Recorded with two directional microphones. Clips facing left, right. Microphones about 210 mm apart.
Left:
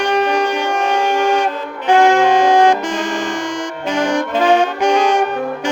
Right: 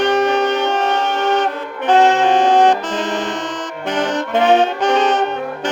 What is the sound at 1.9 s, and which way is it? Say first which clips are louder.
Saxophone: left 1 dB; 10° left (ahead or behind).